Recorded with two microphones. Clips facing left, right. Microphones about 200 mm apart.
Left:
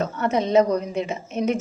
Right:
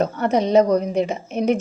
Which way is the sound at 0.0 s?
35° right (ahead or behind).